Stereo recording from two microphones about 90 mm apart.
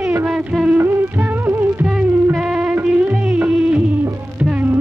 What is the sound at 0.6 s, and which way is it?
Music, 25° right (ahead or behind).